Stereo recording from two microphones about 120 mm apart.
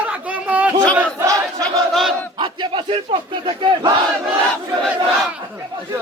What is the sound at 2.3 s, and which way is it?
Battle cry, 40° right (ahead or behind).